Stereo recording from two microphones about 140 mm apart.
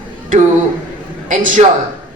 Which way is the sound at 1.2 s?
65° right (ahead or behind).